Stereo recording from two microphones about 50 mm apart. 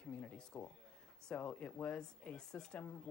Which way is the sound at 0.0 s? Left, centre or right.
Left.